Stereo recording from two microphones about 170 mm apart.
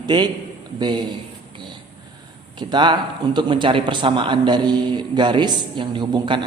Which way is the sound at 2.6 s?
25° right (ahead or behind).